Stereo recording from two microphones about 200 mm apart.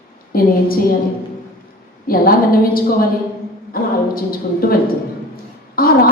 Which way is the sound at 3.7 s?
45° left (ahead or behind).